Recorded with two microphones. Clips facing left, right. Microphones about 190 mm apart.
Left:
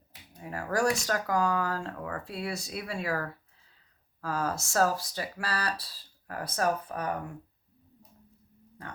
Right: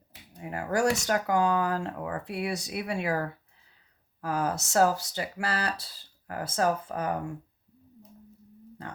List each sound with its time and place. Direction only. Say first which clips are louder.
0.4 s speech: right 2 dB; 25° right (ahead or behind)